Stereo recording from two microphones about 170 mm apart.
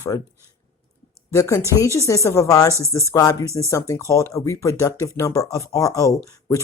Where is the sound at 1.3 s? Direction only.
15° left (ahead or behind).